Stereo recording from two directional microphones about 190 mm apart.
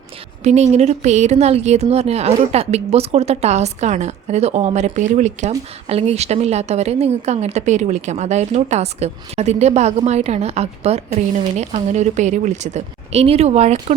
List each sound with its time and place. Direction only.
0.4 s a woman's voice: 35° right (ahead or behind)